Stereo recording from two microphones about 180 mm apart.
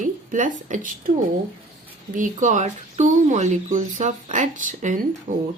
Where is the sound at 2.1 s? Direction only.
45° right (ahead or behind).